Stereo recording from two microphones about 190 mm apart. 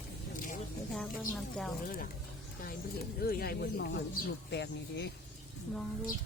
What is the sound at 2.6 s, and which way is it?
Speech, 55° left (ahead or behind).